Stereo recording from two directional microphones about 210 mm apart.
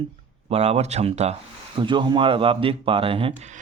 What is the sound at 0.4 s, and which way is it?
Speech, 30° right (ahead or behind).